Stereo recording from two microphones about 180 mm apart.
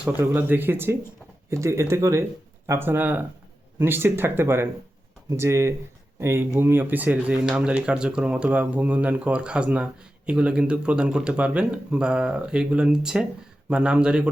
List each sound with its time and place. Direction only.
0.0 s speech: 10° right (ahead or behind)